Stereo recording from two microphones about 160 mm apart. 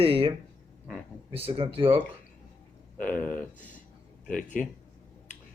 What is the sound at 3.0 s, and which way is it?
Speech, 10° left (ahead or behind).